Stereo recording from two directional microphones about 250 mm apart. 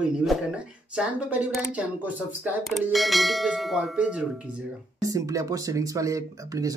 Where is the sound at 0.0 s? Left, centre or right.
Centre.